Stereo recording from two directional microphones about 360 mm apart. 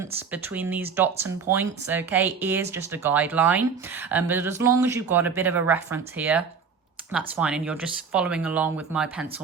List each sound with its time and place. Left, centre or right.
0.0 s speech: centre